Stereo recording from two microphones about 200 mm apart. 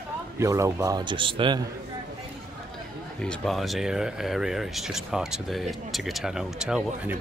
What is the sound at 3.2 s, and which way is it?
Speech, 5° left (ahead or behind).